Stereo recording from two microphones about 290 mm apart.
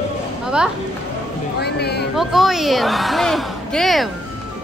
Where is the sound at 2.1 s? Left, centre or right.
Centre.